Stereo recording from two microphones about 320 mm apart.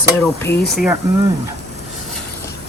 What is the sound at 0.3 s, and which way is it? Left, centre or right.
Speech, centre.